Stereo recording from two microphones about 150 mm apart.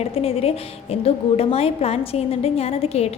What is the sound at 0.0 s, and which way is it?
A woman's voice, 40° left (ahead or behind).